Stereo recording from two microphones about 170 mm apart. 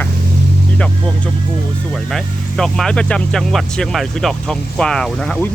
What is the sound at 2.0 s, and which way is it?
Speech, centre (ahead or behind).